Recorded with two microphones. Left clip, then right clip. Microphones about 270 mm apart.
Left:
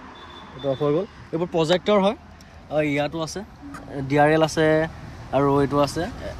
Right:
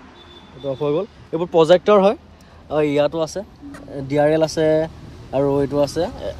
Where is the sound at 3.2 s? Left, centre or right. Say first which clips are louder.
Right 5 dB; centre.